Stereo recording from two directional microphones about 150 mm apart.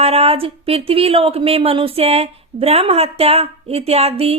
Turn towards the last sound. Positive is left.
turn(degrees=-40)  # may be behind; listen again after turning